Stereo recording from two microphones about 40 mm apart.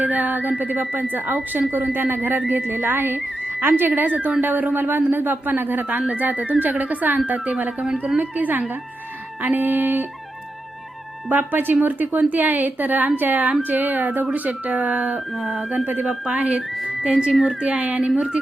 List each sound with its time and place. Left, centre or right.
0.0 s a woman's voice: right
7.3 s speech: right
8.2 s a woman's voice: right
11.3 s a woman's voice: right
16.3 s speech: right
17.0 s speech: right